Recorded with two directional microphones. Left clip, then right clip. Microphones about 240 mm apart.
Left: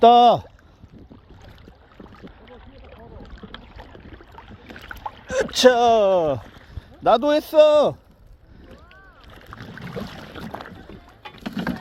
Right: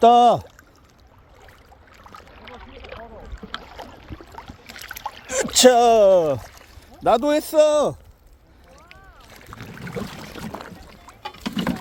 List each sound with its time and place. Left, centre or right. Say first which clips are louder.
0.0 s speech: left 1 dB; centre
2.4 s boat: right 5 dB; right
4.6 s boat: even; right
5.5 s speech: right 2 dB; centre
9.6 s boat: right 2 dB; left
10.5 s music: left 1 dB; left
11.0 s boat: right 5 dB; centre